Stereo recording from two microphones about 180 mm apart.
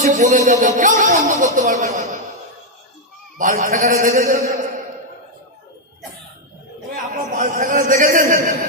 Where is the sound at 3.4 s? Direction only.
45° right (ahead or behind).